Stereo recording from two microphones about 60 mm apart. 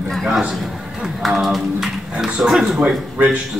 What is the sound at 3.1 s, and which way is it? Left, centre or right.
Speech, right.